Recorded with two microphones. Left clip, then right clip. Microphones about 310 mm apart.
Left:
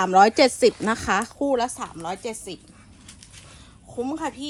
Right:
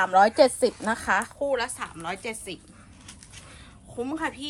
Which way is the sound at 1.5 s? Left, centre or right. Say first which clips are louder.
Left 4 dB; centre.